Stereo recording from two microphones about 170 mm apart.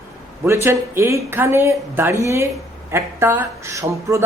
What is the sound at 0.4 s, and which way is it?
A man's voice, 15° right (ahead or behind).